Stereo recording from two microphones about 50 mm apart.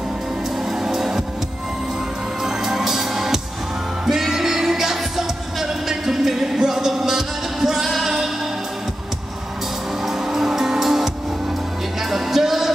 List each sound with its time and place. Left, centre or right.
0.7 s music: centre
2.4 s music: centre
10.0 s music: centre
12.1 s music: centre